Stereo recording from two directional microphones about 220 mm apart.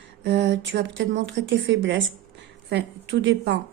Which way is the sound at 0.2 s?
50° right (ahead or behind).